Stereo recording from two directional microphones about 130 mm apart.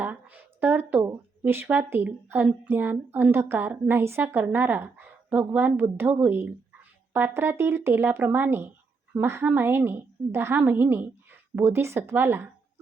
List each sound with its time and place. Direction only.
0.0 s a woman's voice: 15° right (ahead or behind)